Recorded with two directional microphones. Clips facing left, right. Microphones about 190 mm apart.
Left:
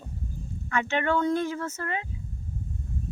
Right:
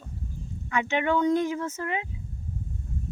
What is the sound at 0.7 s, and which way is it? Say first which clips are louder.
Speech: right 1 dB; 15° right (ahead or behind).